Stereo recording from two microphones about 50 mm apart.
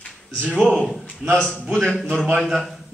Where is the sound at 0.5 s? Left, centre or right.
Centre.